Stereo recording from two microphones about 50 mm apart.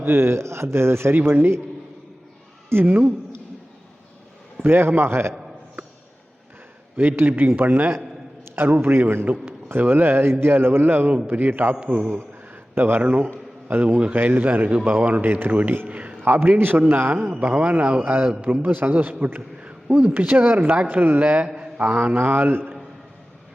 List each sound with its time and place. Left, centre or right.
0.0 s speech: right
2.6 s speech: right
4.6 s a man's voice: right
6.9 s a man's voice: right
7.2 s a man's voice: right
11.8 s a man's voice: right
12.7 s speech: right
13.0 s a man's voice: right
15.9 s a sound: right
16.3 s a man's voice: right
17.3 s a man's voice: right
21.4 s mantra: centre
21.8 s a man's voice: right